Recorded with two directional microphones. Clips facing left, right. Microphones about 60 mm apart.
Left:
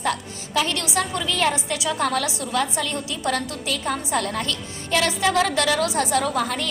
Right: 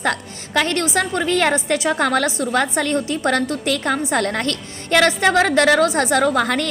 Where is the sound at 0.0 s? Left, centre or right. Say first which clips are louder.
Right 3 dB; right.